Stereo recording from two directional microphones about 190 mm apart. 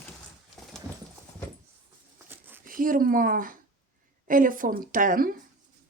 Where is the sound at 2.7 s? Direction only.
45° right (ahead or behind).